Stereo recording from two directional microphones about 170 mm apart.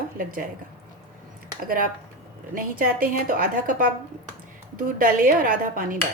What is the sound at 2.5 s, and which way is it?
A woman's voice, 55° right (ahead or behind).